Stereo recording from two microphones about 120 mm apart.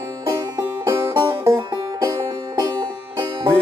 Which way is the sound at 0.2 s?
25° right (ahead or behind).